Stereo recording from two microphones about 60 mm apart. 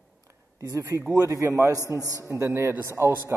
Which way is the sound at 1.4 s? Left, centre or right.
Right.